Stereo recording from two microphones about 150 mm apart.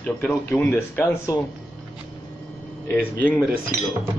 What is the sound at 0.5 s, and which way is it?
Speech, 20° left (ahead or behind).